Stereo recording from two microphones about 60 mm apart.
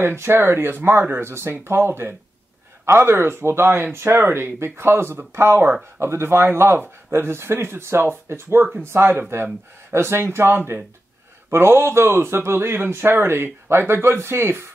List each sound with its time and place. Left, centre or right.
0.0 s speech: right